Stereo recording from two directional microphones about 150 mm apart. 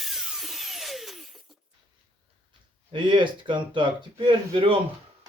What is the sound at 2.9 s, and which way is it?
Speech, 30° right (ahead or behind).